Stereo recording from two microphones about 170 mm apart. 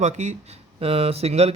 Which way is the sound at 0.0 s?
45° right (ahead or behind).